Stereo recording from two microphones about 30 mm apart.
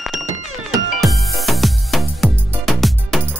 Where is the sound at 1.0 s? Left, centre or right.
Centre.